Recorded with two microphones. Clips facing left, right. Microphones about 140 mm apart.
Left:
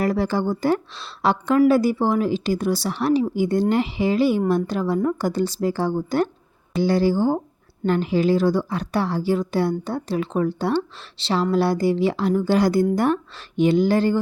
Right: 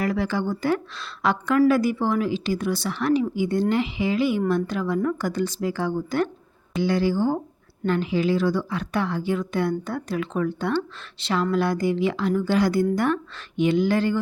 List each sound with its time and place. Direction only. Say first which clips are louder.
0.0 s a woman's voice: left 3 dB; 40° left (ahead or behind)